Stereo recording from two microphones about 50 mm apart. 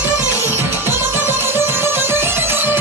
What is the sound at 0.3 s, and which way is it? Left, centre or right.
Music, right.